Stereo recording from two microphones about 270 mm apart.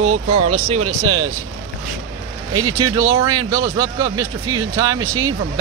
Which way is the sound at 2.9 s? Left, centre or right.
Centre.